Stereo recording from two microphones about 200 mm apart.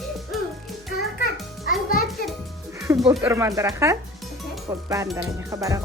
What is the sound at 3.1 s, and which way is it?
Speech, 15° right (ahead or behind).